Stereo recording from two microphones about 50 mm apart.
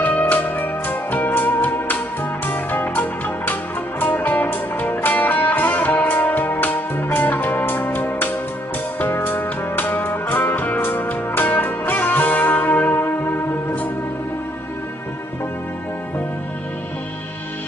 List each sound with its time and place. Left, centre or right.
0.0 s music: left